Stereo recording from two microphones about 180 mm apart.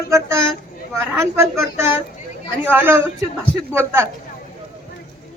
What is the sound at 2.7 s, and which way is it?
A woman's voice, 10° right (ahead or behind).